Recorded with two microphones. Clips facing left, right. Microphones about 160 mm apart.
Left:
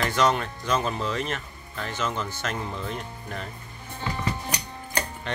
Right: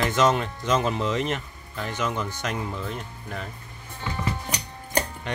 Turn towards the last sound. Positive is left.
turn(degrees=-15)  # may be behind; listen again after turning